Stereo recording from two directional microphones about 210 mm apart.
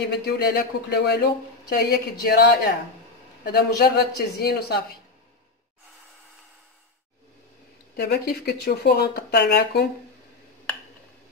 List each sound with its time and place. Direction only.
0.1 s speech: 50° left (ahead or behind)
7.9 s speech: 50° left (ahead or behind)